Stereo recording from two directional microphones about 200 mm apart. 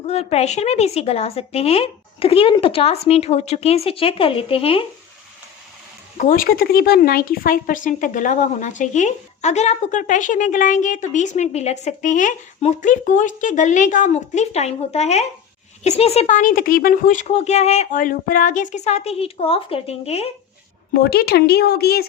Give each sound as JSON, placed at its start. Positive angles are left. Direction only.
{"t": 0.1, "sound": "a woman's voice", "side_deg": 30}
{"t": 6.1, "sound": "a woman's voice", "side_deg": 45}
{"t": 20.9, "sound": "speech", "side_deg": 50}